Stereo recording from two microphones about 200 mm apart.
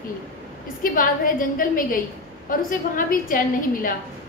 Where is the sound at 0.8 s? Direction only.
45° left (ahead or behind).